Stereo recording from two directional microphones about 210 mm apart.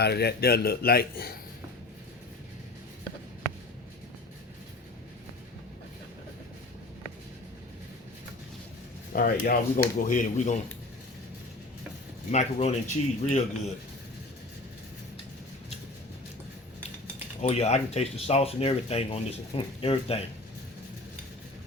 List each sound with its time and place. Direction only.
0.0 s a man's voice: 50° left (ahead or behind)
9.1 s speech: 45° left (ahead or behind)
12.3 s speech: 30° left (ahead or behind)
17.4 s speech: 30° left (ahead or behind)